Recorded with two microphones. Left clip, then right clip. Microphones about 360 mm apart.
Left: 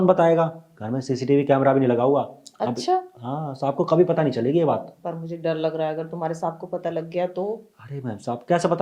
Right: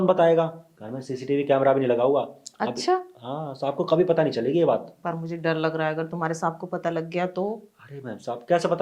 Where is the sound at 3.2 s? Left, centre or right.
Left.